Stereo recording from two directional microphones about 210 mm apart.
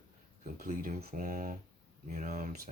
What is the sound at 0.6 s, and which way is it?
Speech, 40° right (ahead or behind).